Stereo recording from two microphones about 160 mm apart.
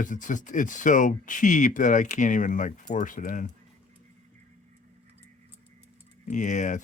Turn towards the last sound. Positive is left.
turn(degrees=50)  # may be behind; listen again after turning